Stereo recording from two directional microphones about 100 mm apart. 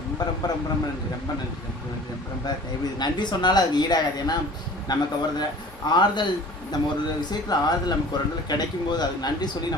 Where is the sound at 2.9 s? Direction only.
45° left (ahead or behind).